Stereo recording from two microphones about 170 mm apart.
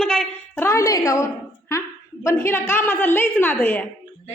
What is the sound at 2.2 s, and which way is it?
A woman's voice, 15° left (ahead or behind).